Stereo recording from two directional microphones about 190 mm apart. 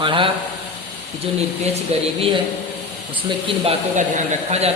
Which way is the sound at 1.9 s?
35° right (ahead or behind).